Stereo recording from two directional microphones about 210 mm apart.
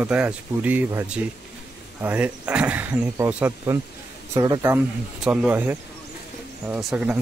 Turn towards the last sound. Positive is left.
turn(degrees=-5)  # may be behind; listen again after turning